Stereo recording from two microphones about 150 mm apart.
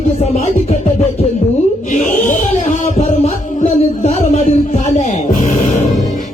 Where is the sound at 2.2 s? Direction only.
60° left (ahead or behind).